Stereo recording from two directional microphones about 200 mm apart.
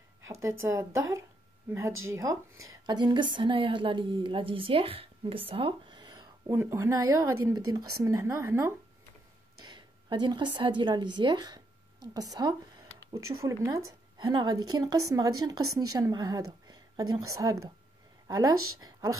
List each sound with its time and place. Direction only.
0.4 s a woman's voice: 15° right (ahead or behind)
18.5 s speech: 90° right
18.8 s speech: 20° right (ahead or behind)